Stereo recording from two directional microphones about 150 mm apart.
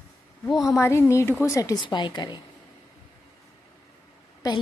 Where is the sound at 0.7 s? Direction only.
20° left (ahead or behind).